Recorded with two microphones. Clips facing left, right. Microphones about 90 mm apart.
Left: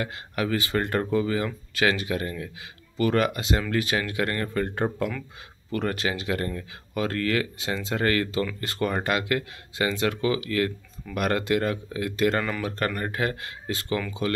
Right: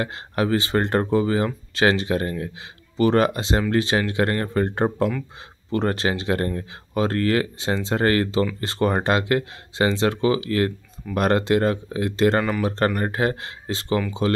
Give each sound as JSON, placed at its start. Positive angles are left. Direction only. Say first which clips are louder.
{"t": 0.0, "sound": "speech", "louder": "right 5 dB", "side_deg": -35}